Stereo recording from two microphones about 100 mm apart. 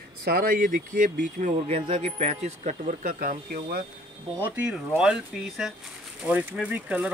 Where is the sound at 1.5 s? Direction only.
85° right.